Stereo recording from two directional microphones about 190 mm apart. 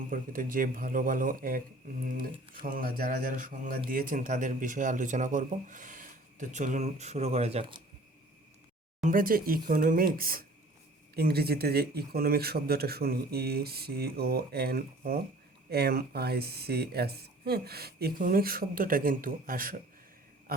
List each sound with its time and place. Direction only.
0.1 s a man's voice: 50° right (ahead or behind); by 7.8 s 30° right (ahead or behind)
9.0 s speech: 45° right (ahead or behind)